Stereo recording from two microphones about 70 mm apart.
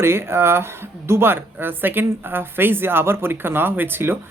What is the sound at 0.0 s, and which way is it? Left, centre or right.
Speech, right.